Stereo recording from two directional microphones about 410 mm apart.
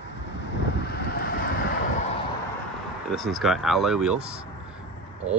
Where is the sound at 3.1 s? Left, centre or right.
Centre.